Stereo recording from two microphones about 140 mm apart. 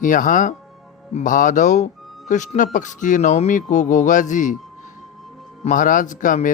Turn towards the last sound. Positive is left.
turn(degrees=65)  # may be behind; listen again after turning